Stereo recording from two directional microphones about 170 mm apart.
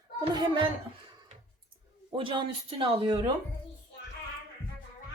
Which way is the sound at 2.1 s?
30° right (ahead or behind).